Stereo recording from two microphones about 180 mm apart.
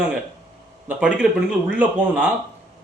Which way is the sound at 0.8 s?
5° right (ahead or behind).